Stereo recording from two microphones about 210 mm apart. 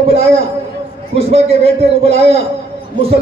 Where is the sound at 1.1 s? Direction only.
30° right (ahead or behind).